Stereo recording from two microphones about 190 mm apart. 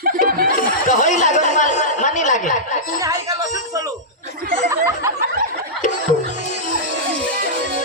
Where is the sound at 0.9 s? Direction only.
40° left (ahead or behind).